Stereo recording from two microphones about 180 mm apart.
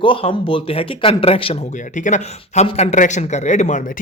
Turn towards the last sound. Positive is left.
turn(degrees=40)  # may be behind; listen again after turning